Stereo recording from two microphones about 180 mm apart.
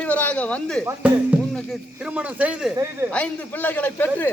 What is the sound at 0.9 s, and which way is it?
Speech, 10° right (ahead or behind).